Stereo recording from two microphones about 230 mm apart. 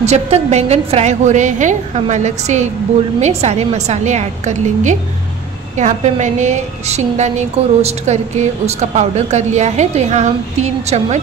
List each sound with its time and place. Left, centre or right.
0.0 s a woman's voice: right